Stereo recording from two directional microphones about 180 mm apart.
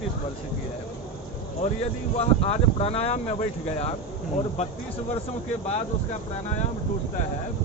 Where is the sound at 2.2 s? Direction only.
35° left (ahead or behind).